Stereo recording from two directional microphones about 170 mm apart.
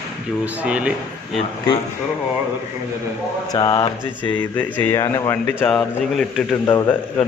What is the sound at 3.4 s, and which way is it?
Speech, 25° left (ahead or behind).